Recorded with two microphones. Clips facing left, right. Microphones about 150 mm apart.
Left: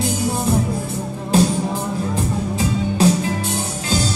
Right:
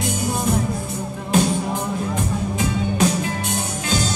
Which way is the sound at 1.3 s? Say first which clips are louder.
Left 3 dB; 35° left (ahead or behind).